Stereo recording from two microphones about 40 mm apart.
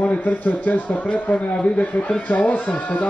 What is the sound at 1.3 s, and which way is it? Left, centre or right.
Speech, left.